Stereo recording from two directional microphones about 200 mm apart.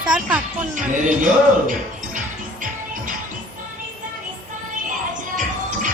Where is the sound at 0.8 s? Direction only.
40° right (ahead or behind).